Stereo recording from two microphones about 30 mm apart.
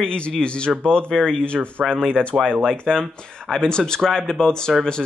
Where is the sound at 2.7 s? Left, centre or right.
Left.